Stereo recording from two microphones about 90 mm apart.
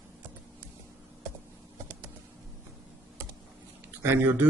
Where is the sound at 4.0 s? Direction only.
25° right (ahead or behind).